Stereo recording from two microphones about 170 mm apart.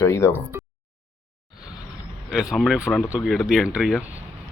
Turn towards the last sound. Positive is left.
turn(degrees=0)  # may be behind; listen again after turning